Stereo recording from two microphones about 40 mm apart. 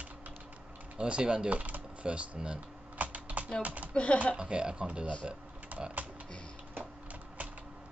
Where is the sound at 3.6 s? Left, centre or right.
Right.